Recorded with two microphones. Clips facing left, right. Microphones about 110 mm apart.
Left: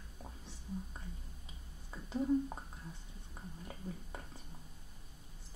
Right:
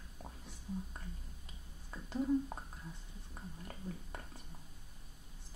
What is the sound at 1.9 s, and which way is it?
Speech, centre (ahead or behind).